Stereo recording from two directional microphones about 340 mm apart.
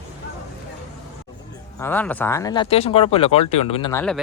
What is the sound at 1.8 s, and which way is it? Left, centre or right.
Speech, centre.